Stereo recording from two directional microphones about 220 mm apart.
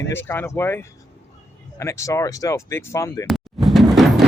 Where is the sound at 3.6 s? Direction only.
Centre (ahead or behind).